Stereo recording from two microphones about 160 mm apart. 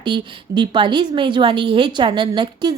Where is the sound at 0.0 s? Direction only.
30° right (ahead or behind).